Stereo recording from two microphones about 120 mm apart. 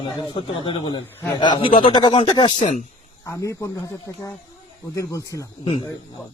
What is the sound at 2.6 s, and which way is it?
Speech, 90° left.